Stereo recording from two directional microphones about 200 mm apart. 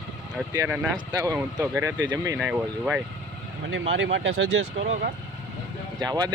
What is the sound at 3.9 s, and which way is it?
Speech, 70° right (ahead or behind).